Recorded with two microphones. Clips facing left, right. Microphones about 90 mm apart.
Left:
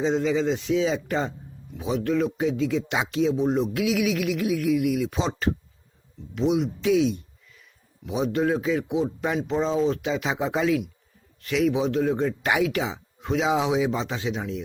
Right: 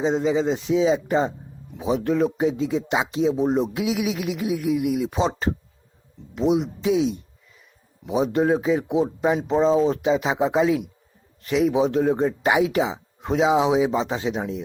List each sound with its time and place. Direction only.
0.0 s a man's voice: 25° right (ahead or behind)
12.4 s a man's voice: 20° right (ahead or behind)